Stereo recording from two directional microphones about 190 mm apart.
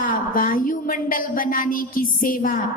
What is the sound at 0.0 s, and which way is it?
A woman's voice, 45° left (ahead or behind).